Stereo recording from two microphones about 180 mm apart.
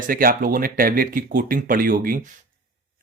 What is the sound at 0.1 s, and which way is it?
Speech, 50° right (ahead or behind).